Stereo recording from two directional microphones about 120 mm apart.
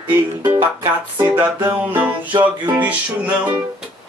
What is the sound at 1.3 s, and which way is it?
Music, 15° right (ahead or behind).